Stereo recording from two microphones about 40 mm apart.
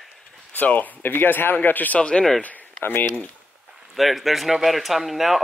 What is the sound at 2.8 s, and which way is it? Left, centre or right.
Speech, left.